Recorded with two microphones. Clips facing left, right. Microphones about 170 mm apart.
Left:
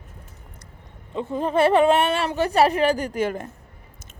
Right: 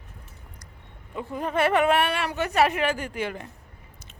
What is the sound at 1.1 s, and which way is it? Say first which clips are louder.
A woman's voice: left 5 dB; 25° left (ahead or behind).